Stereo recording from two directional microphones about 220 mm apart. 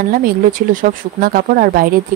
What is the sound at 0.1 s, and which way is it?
Speech, 40° right (ahead or behind).